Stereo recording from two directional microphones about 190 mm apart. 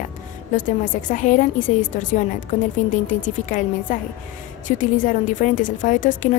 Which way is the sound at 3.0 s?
40° left (ahead or behind).